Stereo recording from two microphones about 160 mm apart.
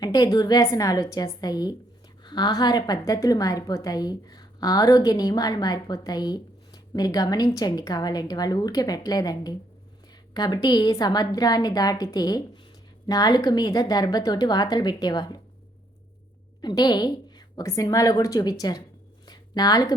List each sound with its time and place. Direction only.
0.0 s a woman's voice: 25° left (ahead or behind)
16.6 s a woman's voice: 25° left (ahead or behind)
19.3 s a sound: 25° left (ahead or behind)